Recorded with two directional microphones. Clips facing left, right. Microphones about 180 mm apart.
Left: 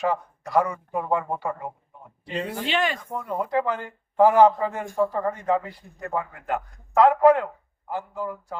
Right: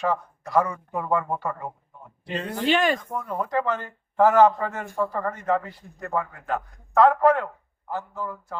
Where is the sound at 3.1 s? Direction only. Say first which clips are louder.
Left 1 dB; 15° left (ahead or behind).